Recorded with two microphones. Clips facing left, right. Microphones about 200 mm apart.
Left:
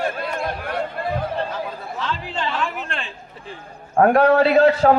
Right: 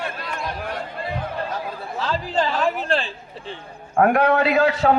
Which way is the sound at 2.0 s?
40° right (ahead or behind).